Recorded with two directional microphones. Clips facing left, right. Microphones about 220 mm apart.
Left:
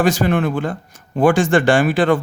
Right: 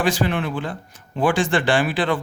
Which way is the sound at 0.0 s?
45° left (ahead or behind).